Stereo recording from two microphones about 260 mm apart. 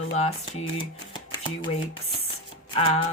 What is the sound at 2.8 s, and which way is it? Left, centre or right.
Speech, left.